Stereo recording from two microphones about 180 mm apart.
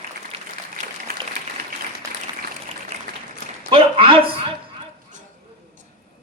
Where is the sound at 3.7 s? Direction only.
30° right (ahead or behind).